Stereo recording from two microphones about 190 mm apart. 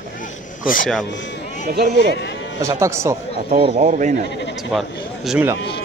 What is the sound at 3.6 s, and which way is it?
Speech, 40° right (ahead or behind).